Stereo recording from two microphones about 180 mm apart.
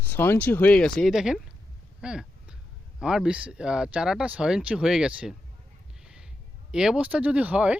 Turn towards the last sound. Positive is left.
turn(degrees=-5)  # may be behind; listen again after turning